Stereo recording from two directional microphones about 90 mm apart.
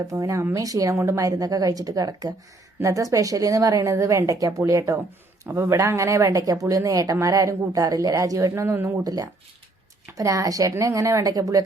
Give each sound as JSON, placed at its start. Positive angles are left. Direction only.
{"t": 0.1, "sound": "a woman's voice", "side_deg": -40}
{"t": 9.0, "sound": "a woman's voice", "side_deg": -45}